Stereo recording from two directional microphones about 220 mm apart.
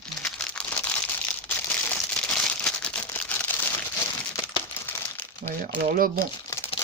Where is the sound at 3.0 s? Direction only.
10° left (ahead or behind).